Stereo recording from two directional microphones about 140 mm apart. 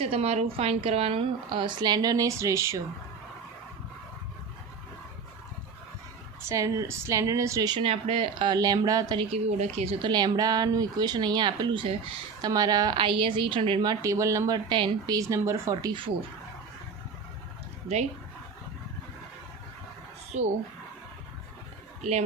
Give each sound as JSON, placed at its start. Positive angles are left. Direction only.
{"t": 0.0, "sound": "a woman's voice", "side_deg": -45}
{"t": 6.5, "sound": "speech", "side_deg": -25}
{"t": 7.8, "sound": "speech", "side_deg": -40}
{"t": 9.1, "sound": "speech", "side_deg": -45}
{"t": 10.1, "sound": "a woman's voice", "side_deg": -30}
{"t": 14.0, "sound": "speech", "side_deg": -20}
{"t": 20.3, "sound": "speech", "side_deg": -55}